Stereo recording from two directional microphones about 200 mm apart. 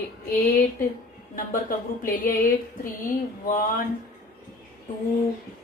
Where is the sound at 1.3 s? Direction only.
45° left (ahead or behind).